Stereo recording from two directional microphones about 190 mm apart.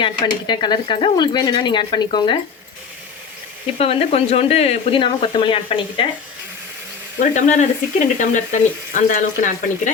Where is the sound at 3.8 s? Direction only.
30° left (ahead or behind).